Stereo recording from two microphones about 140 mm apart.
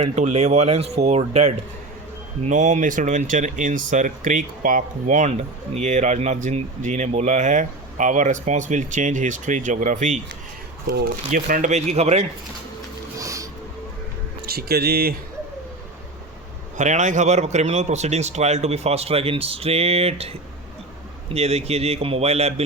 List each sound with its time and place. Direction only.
0.2 s a man's voice: 55° right (ahead or behind)
11.0 s speech: 75° right (ahead or behind); by 12.2 s 50° right (ahead or behind)
13.1 s music: 25° right (ahead or behind)
14.4 s speech: 90° right
16.7 s a man's voice: 60° right (ahead or behind)
21.3 s a man's voice: 50° right (ahead or behind)